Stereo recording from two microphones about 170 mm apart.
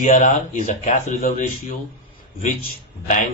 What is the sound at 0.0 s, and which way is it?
Speech, 45° left (ahead or behind).